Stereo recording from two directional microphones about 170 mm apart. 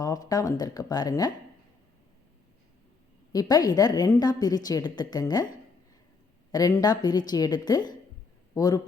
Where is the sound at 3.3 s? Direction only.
20° left (ahead or behind).